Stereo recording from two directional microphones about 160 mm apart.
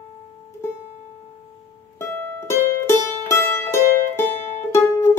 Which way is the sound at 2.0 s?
15° left (ahead or behind).